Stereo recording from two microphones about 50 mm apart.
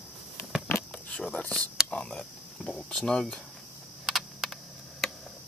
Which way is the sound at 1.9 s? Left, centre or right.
Centre.